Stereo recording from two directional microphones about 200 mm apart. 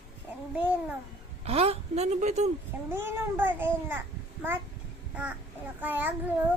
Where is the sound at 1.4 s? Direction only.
30° right (ahead or behind).